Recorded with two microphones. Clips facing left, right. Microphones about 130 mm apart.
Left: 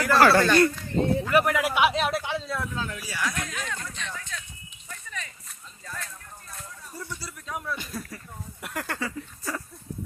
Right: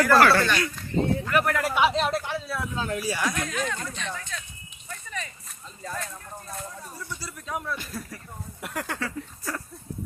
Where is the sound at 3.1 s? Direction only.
30° right (ahead or behind).